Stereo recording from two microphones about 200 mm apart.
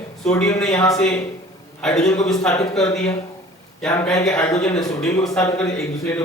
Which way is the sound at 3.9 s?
10° left (ahead or behind).